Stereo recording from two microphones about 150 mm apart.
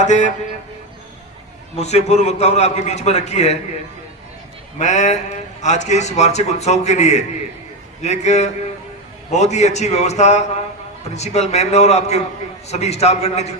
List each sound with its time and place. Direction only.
0.0 s a man's voice: 55° left (ahead or behind)
1.7 s a man's voice: 45° left (ahead or behind)
4.8 s a man's voice: 55° left (ahead or behind)